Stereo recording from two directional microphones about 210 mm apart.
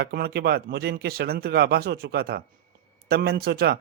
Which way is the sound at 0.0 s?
45° right (ahead or behind).